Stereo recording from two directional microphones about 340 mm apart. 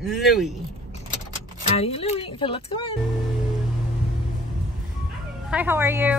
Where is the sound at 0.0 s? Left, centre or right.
Centre.